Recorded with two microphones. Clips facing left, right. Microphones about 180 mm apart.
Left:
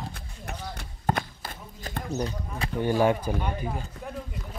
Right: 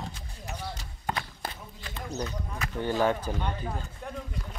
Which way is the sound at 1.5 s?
50° left (ahead or behind).